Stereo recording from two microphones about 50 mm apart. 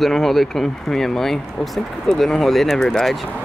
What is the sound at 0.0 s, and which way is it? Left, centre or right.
Speech, centre.